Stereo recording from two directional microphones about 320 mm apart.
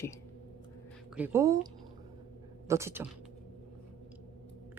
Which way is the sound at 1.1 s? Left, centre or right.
Centre.